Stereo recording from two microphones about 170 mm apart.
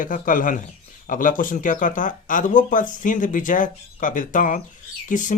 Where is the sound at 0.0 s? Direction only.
50° left (ahead or behind).